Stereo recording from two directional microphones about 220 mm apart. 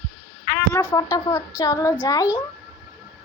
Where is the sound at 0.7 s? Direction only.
15° left (ahead or behind).